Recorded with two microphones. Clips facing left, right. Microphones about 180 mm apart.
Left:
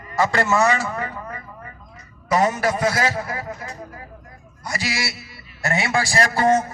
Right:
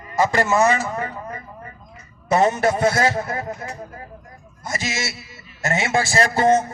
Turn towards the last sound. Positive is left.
turn(degrees=-20)  # may be behind; listen again after turning